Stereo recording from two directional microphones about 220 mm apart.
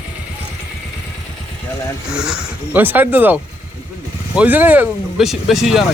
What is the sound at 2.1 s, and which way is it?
Speech, 5° right (ahead or behind).